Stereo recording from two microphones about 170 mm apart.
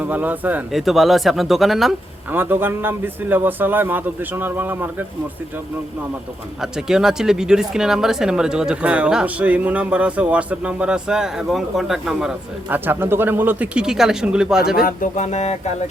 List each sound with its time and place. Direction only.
0.0 s speech: 10° right (ahead or behind)
2.4 s a man's voice: 10° right (ahead or behind)
6.6 s speech: 5° right (ahead or behind)
14.8 s a sound: 55° left (ahead or behind)